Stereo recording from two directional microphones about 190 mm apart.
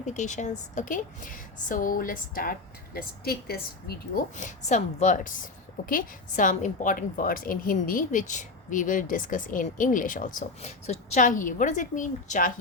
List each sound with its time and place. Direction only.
0.0 s a woman's voice: 40° left (ahead or behind)